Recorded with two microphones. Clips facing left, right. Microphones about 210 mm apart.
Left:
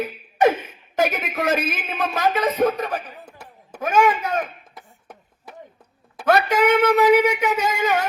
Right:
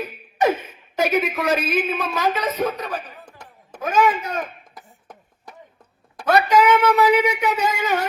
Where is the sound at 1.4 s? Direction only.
50° left (ahead or behind).